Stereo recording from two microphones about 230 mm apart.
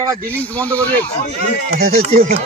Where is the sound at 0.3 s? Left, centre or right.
Centre.